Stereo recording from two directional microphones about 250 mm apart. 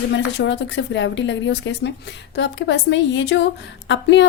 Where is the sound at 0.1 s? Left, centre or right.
Left.